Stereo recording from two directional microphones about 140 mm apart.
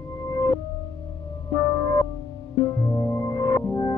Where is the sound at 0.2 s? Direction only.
20° left (ahead or behind).